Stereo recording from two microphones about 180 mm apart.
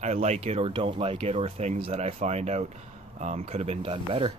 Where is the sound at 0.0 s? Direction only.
40° right (ahead or behind).